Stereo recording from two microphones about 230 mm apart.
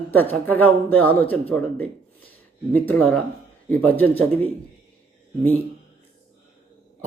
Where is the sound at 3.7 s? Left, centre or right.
Centre.